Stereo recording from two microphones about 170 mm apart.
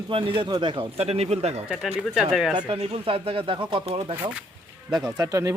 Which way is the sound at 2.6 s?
30° right (ahead or behind).